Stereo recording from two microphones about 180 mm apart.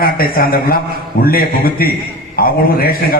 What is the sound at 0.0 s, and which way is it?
A man's voice, 55° left (ahead or behind).